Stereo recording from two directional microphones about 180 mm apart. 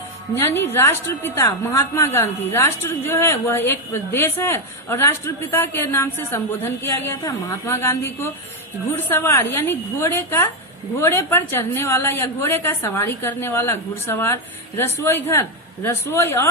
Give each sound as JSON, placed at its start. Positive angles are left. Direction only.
{"t": 0.3, "sound": "a woman's voice", "side_deg": 15}